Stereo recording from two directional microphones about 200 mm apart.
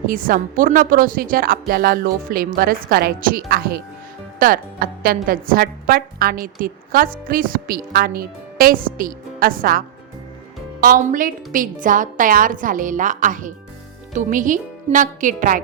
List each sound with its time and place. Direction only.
0.1 s a woman's voice: 45° right (ahead or behind)